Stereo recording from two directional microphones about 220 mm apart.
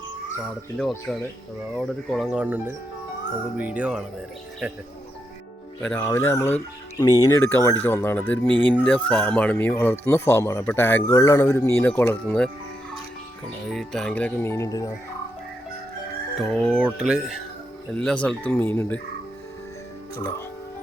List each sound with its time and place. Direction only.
1.7 s speech: centre (ahead or behind)
5.8 s speech: 5° left (ahead or behind)
13.7 s speech: centre (ahead or behind)
16.4 s speech: centre (ahead or behind)